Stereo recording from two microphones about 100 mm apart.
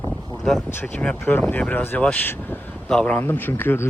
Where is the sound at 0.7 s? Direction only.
20° left (ahead or behind).